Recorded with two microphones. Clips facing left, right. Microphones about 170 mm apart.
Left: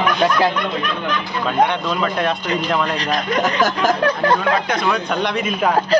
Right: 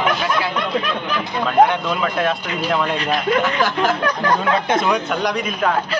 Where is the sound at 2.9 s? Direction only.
40° left (ahead or behind).